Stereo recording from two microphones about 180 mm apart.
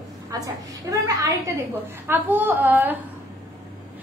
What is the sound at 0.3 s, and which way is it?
A woman's voice, 20° right (ahead or behind).